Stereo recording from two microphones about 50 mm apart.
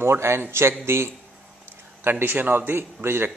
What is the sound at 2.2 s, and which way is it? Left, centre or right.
A man's voice, right.